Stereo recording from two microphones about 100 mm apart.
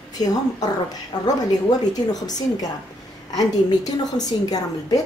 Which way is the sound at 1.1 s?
40° left (ahead or behind).